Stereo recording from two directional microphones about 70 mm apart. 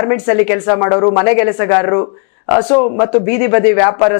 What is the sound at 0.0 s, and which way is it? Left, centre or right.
Speech, left.